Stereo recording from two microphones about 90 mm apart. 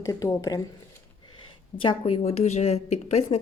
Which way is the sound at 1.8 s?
80° left.